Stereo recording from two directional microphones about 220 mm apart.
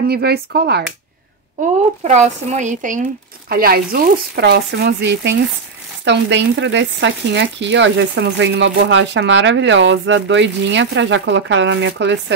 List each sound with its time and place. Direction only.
0.1 s speech: 45° right (ahead or behind)
2.0 s speech: 30° right (ahead or behind); by 12.4 s 55° right (ahead or behind)